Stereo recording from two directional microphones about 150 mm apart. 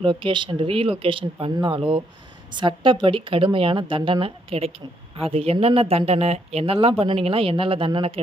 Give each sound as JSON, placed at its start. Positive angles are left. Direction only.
{"t": 0.0, "sound": "speech", "side_deg": -35}